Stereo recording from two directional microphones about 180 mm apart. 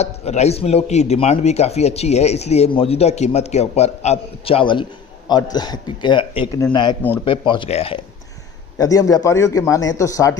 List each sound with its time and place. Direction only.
0.0 s a man's voice: 35° left (ahead or behind)
8.8 s a man's voice: 20° left (ahead or behind)